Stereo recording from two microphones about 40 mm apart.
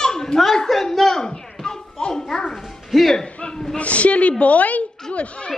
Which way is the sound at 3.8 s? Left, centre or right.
Left.